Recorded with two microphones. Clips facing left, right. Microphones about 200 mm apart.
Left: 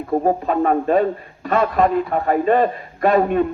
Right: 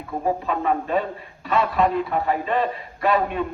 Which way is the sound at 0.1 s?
45° left (ahead or behind).